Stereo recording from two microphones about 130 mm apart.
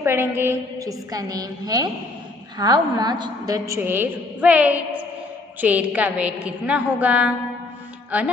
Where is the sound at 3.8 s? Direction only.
15° right (ahead or behind).